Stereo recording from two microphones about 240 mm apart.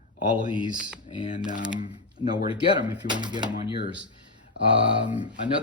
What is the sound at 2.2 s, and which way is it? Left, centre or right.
Speech, left.